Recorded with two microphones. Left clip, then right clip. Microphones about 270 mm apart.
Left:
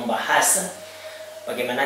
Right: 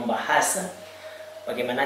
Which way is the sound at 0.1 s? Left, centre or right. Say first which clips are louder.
Left 3 dB; centre.